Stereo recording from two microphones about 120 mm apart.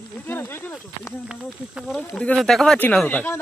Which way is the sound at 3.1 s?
15° left (ahead or behind).